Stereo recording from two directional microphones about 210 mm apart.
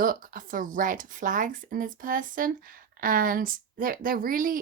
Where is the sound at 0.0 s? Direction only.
40° right (ahead or behind).